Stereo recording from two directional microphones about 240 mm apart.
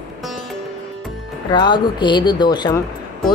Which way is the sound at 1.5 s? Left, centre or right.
Centre.